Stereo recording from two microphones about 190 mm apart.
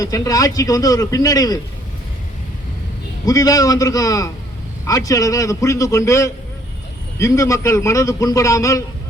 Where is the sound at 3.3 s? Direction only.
20° left (ahead or behind).